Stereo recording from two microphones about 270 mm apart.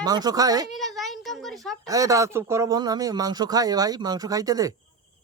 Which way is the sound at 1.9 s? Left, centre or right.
Centre.